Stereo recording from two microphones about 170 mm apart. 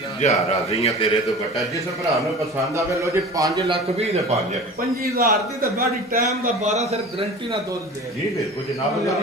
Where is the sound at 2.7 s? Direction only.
15° right (ahead or behind).